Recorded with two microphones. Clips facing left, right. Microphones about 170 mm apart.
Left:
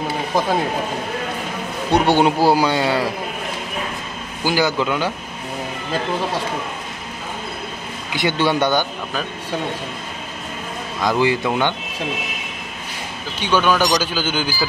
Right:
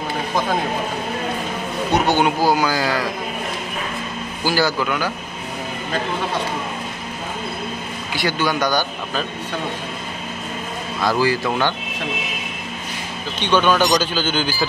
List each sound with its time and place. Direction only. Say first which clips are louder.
1.9 s a man's voice: left 3 dB; 30° left (ahead or behind)
4.5 s a man's voice: left 1 dB; 20° left (ahead or behind)
8.1 s a man's voice: left 3 dB; 20° left (ahead or behind)
11.0 s a man's voice: left 1 dB; 20° left (ahead or behind)
13.4 s a man's voice: right 1 dB; 10° left (ahead or behind)